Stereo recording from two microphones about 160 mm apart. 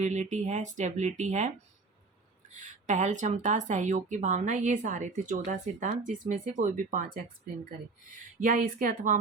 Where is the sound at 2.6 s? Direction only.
50° right (ahead or behind).